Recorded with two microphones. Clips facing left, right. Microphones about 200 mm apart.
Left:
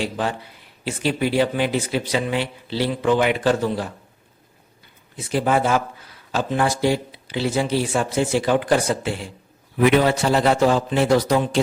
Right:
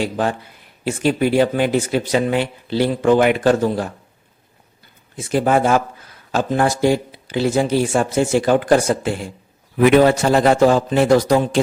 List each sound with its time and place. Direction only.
0.0 s speech: 50° right (ahead or behind)
5.1 s speech: 45° right (ahead or behind)